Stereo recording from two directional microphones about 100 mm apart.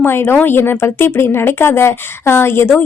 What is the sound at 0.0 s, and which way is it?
Speech, 25° left (ahead or behind).